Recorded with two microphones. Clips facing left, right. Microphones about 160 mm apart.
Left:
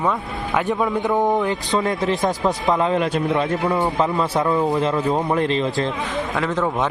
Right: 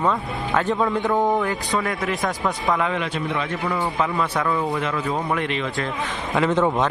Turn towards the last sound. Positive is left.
turn(degrees=-5)  # may be behind; listen again after turning